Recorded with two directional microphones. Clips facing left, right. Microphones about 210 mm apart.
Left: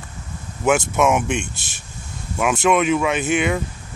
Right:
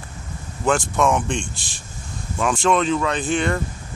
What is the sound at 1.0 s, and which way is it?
Speech, 10° left (ahead or behind).